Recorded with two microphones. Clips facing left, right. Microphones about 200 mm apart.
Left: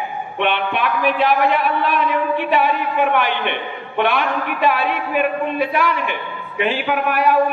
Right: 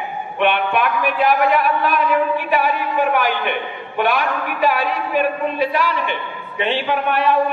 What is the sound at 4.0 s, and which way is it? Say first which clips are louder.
A man's voice: even; 40° right (ahead or behind).